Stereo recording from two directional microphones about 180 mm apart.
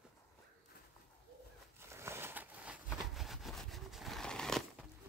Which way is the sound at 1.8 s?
15° right (ahead or behind).